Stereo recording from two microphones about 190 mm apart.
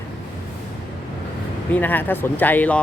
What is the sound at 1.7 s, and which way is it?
Speech, 10° left (ahead or behind).